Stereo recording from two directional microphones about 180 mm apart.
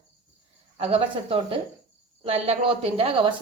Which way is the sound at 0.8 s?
30° right (ahead or behind).